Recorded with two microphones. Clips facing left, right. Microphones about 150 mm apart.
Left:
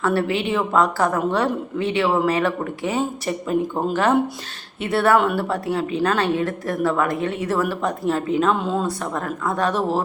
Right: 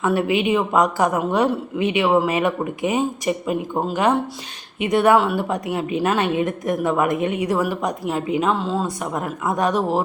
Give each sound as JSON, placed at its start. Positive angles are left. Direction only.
{"t": 0.0, "sound": "a woman's voice", "side_deg": -15}
{"t": 4.8, "sound": "a woman's voice", "side_deg": -15}
{"t": 5.1, "sound": "speech", "side_deg": 0}
{"t": 5.4, "sound": "a woman's voice", "side_deg": -15}